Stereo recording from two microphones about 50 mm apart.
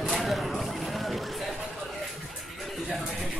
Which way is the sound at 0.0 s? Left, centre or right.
Centre.